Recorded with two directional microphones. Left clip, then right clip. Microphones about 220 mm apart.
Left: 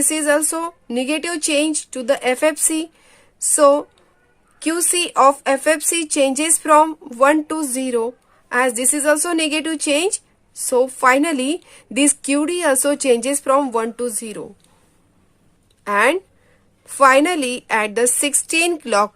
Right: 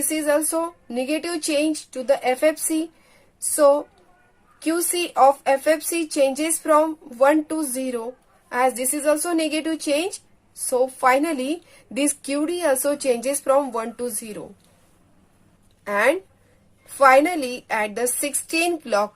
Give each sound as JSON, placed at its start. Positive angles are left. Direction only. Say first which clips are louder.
{"t": 0.1, "sound": "a woman's voice", "louder": "left 2 dB", "side_deg": 40}
{"t": 15.8, "sound": "a woman's voice", "louder": "left 4 dB", "side_deg": 40}